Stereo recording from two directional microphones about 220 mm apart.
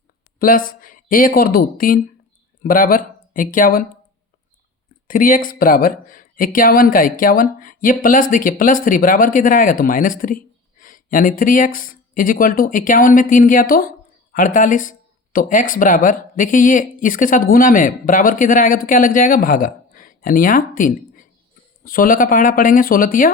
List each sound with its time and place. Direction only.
0.3 s speech: 40° left (ahead or behind)
5.0 s speech: 40° left (ahead or behind)